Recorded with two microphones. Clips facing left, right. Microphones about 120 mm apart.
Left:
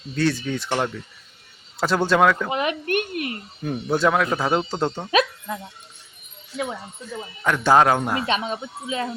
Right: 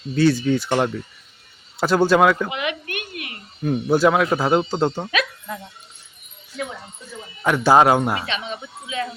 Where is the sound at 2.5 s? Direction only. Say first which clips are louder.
Left 3 dB; 40° left (ahead or behind).